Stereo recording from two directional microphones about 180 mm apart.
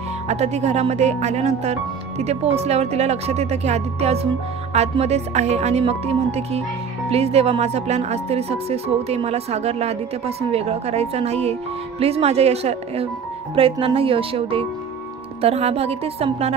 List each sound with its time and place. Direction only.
0.3 s speech: 40° right (ahead or behind)